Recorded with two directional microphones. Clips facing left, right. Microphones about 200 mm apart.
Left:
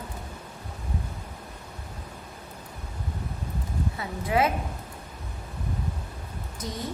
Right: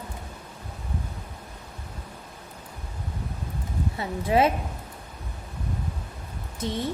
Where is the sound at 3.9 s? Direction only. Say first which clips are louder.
Right 4 dB; 25° right (ahead or behind).